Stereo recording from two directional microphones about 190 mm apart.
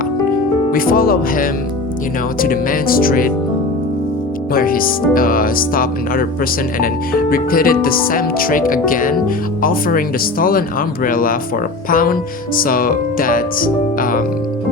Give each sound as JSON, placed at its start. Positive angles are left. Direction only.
{"t": 0.7, "sound": "speech", "side_deg": 50}
{"t": 4.5, "sound": "speech", "side_deg": 50}